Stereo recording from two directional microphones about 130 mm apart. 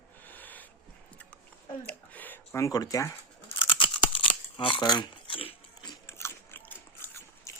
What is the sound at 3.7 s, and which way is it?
Tearing, 40° left (ahead or behind).